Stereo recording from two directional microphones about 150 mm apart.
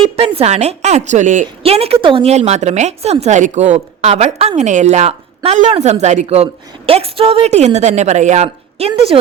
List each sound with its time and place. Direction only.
0.2 s a woman's voice: 45° right (ahead or behind)
1.6 s a woman's voice: 40° right (ahead or behind)